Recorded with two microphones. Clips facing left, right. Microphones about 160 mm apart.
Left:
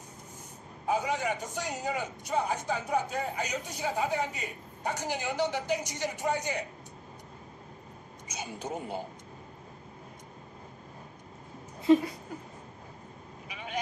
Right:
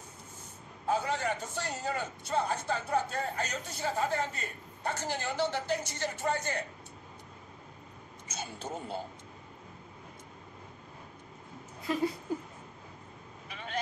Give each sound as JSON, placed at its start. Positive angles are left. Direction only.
{"t": 0.8, "sound": "a man's voice", "side_deg": 15}
{"t": 8.3, "sound": "a man's voice", "side_deg": 15}
{"t": 11.9, "sound": "speech", "side_deg": 25}
{"t": 12.3, "sound": "a sound", "side_deg": -25}
{"t": 13.5, "sound": "vehicle", "side_deg": 10}